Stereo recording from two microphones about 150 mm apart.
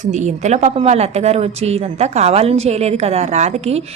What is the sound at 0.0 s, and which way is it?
A woman's voice, 55° right (ahead or behind).